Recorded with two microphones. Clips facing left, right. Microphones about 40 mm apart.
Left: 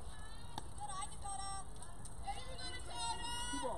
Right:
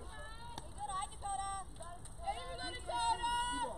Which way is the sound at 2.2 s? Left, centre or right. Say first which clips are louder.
Right 6 dB; right.